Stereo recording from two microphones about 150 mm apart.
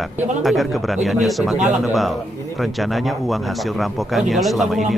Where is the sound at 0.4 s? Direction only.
Centre (ahead or behind).